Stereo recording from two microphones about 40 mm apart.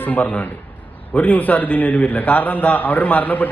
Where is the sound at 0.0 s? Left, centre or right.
Left.